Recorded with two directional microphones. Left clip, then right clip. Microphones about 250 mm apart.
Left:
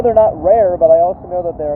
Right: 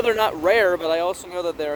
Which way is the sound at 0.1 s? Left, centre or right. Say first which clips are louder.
Left 8 dB; right.